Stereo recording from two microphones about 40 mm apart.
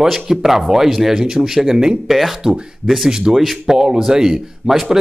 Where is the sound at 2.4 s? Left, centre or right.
Centre.